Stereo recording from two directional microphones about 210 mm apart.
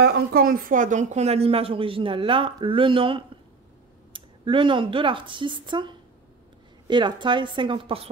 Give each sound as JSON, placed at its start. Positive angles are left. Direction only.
{"t": 0.0, "sound": "speech", "side_deg": -45}